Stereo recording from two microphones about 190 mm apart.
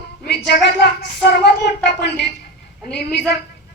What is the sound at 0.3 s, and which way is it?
Speech, 60° left (ahead or behind).